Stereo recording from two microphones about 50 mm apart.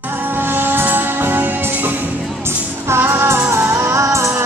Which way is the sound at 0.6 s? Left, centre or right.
Right.